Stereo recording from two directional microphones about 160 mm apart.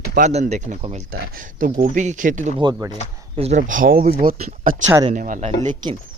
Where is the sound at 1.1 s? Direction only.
60° right (ahead or behind).